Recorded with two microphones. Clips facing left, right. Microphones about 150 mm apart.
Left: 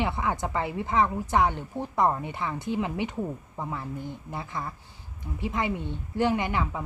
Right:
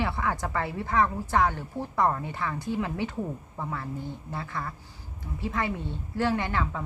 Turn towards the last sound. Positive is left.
turn(degrees=15)  # may be behind; listen again after turning